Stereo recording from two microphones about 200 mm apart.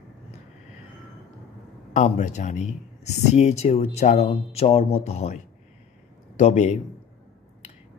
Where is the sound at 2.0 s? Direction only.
35° left (ahead or behind).